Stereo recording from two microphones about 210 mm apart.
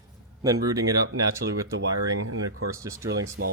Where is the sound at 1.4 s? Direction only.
50° right (ahead or behind).